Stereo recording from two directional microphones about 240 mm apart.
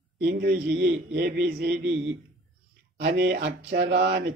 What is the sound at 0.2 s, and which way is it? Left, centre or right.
Speech, right.